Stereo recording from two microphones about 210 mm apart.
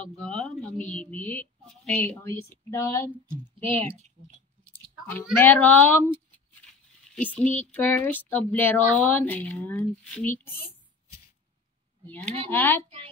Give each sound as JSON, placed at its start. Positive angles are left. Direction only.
{"t": 0.0, "sound": "a woman's voice", "side_deg": 5}
{"t": 3.6, "sound": "speech", "side_deg": -25}
{"t": 5.0, "sound": "speech", "side_deg": 10}
{"t": 7.2, "sound": "speech", "side_deg": 10}
{"t": 12.1, "sound": "a woman's voice", "side_deg": 5}